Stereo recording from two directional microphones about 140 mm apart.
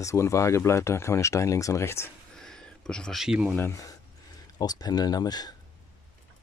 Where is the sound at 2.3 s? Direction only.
5° left (ahead or behind).